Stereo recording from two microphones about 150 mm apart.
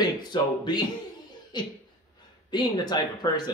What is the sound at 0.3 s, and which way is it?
Speech, 30° left (ahead or behind).